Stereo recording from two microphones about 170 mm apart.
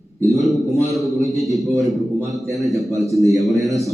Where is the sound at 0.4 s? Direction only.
Centre (ahead or behind).